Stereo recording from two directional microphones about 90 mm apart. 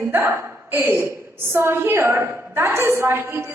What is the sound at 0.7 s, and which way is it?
A woman's voice, 25° right (ahead or behind).